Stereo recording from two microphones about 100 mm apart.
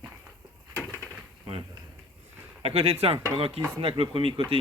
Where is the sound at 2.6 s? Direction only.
75° right (ahead or behind).